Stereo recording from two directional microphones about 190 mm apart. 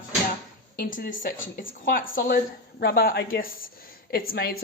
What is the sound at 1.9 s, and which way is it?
Speech, 45° left (ahead or behind).